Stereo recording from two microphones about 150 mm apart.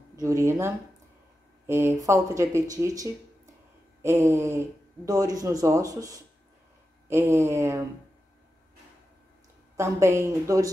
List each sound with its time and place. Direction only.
0.1 s speech: 20° right (ahead or behind)
9.8 s speech: 20° right (ahead or behind)